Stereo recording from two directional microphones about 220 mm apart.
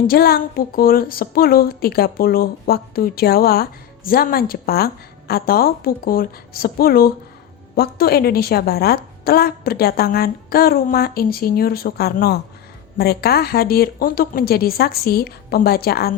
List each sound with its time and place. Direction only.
0.1 s a woman's voice: 45° left (ahead or behind)